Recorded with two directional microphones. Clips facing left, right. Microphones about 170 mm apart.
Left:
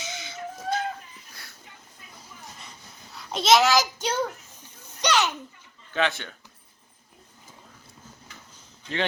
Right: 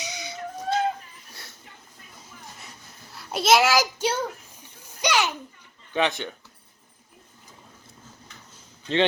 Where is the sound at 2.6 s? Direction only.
5° right (ahead or behind).